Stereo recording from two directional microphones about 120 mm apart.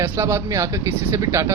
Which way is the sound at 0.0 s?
20° right (ahead or behind).